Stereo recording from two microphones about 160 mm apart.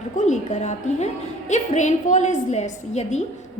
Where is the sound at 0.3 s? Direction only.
45° left (ahead or behind).